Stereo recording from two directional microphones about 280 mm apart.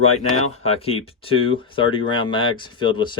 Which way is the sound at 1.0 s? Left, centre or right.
Centre.